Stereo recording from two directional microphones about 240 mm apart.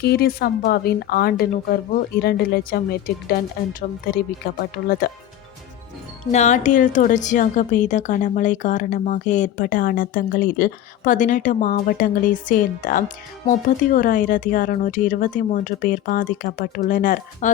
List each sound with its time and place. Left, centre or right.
0.0 s a woman's voice: left
4.8 s a woman's voice: left
6.3 s a woman's voice: left